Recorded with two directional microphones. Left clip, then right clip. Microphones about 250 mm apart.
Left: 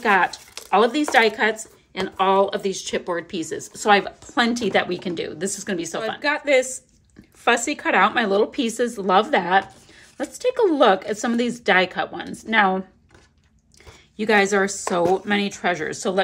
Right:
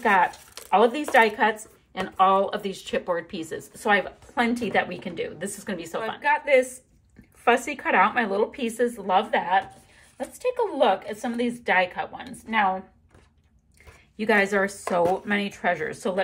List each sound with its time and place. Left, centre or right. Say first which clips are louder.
0.0 s speech: left 2 dB; centre
14.1 s speech: left 3 dB; centre